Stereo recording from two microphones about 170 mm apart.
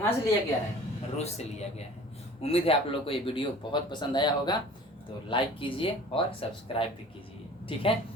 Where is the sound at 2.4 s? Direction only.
35° left (ahead or behind).